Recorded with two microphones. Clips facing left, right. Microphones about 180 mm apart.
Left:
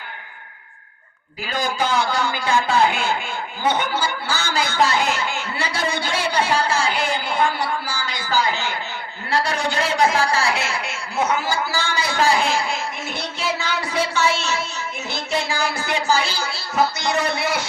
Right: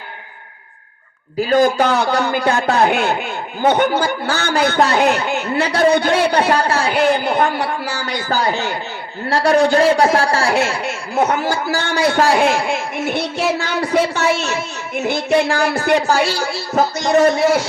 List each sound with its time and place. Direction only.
1.5 s a man's voice: 55° right (ahead or behind)
9.6 s a man's voice: 45° right (ahead or behind)
11.3 s a man's voice: 65° right (ahead or behind)
16.7 s a man's voice: 45° right (ahead or behind)